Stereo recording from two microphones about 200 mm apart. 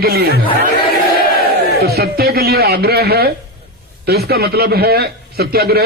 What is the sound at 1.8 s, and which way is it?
A man's voice, 50° right (ahead or behind).